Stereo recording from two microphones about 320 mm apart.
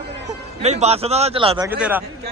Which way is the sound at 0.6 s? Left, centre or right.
Centre.